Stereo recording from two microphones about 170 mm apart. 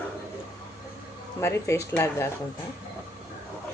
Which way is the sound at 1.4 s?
15° left (ahead or behind).